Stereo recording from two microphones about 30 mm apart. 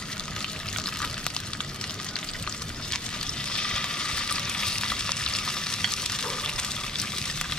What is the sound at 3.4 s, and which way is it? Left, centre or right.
Frying, left.